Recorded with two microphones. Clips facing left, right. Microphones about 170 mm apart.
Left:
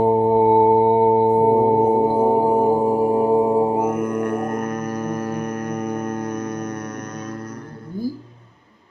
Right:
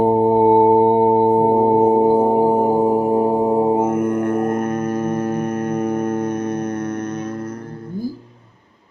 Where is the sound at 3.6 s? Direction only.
25° right (ahead or behind).